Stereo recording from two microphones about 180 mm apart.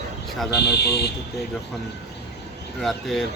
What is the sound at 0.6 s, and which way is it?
Speech, 65° left (ahead or behind).